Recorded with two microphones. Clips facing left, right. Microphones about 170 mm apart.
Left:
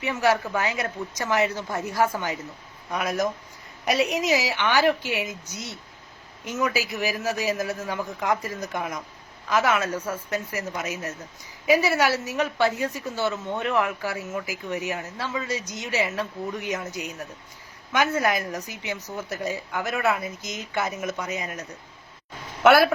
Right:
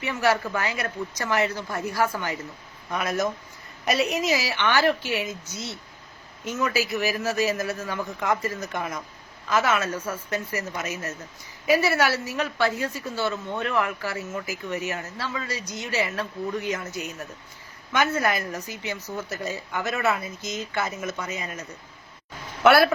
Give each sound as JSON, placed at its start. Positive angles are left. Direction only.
{"t": 0.0, "sound": "speech", "side_deg": 15}
{"t": 7.5, "sound": "a man's voice", "side_deg": 0}
{"t": 7.8, "sound": "speech", "side_deg": 15}